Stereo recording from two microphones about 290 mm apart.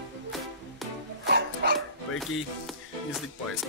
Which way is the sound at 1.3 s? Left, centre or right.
Right.